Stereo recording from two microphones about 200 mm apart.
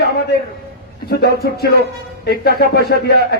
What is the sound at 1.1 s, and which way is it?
A man's voice, 50° left (ahead or behind).